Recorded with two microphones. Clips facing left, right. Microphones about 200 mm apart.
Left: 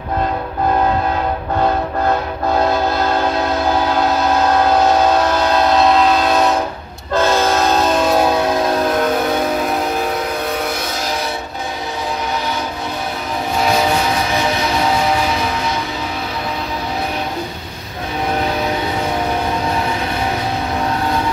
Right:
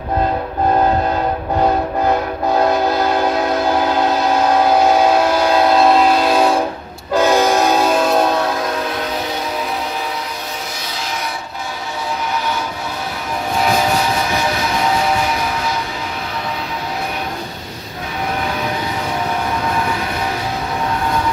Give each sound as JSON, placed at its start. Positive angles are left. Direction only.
{"t": 4.6, "sound": "train", "side_deg": -10}
{"t": 8.9, "sound": "vehicle", "side_deg": 50}